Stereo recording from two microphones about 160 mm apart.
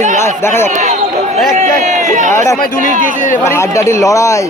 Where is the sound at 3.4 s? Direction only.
15° left (ahead or behind).